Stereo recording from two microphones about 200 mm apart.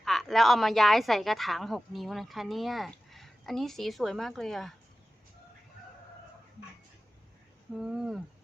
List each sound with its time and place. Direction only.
0.0 s speech: centre (ahead or behind)
7.7 s speech: centre (ahead or behind)